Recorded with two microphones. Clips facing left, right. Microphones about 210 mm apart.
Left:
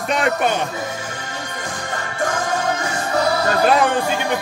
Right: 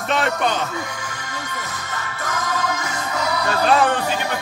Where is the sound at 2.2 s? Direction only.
30° left (ahead or behind).